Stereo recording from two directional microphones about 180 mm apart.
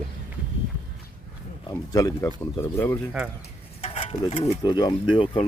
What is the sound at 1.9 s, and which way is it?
Speech, 20° left (ahead or behind).